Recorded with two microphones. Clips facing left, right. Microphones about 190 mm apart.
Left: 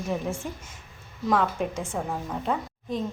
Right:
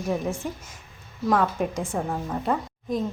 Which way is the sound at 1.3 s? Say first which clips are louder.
Right 2 dB; centre (ahead or behind).